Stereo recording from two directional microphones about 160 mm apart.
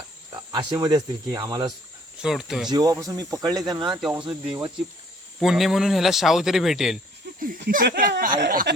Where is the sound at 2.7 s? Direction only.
25° right (ahead or behind).